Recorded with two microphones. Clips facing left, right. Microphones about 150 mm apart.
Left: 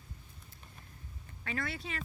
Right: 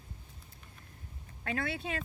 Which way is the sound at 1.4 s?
55° right (ahead or behind).